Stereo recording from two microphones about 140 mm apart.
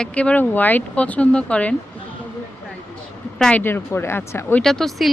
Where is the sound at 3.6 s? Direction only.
15° left (ahead or behind).